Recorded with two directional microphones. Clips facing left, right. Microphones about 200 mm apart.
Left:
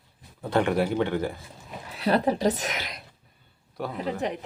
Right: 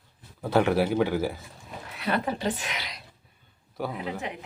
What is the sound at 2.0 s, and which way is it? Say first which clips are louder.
A woman's voice: left 5 dB; 35° left (ahead or behind).